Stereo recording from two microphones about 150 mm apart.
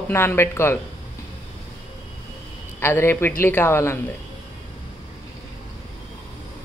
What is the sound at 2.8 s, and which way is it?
A man's voice, 15° left (ahead or behind).